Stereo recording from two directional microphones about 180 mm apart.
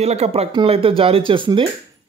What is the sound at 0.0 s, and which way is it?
Speech, 35° right (ahead or behind).